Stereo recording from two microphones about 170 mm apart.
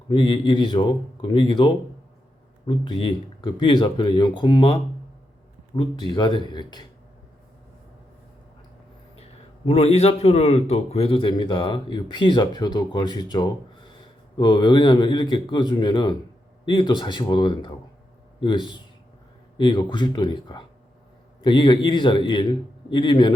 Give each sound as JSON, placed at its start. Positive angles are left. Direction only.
{"t": 0.1, "sound": "a man's voice", "side_deg": 30}
{"t": 9.6, "sound": "a man's voice", "side_deg": 35}